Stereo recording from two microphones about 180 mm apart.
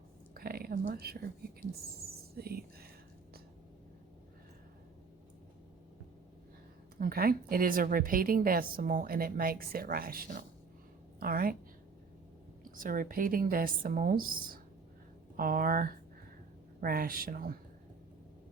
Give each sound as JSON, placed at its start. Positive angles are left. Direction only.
{"t": 0.3, "sound": "whispering", "side_deg": -55}
{"t": 2.3, "sound": "speech", "side_deg": -60}
{"t": 7.0, "sound": "a woman's voice", "side_deg": -55}
{"t": 12.7, "sound": "a woman's voice", "side_deg": -50}